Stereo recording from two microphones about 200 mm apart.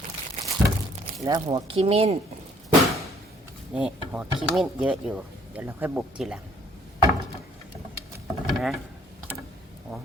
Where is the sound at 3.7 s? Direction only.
5° right (ahead or behind).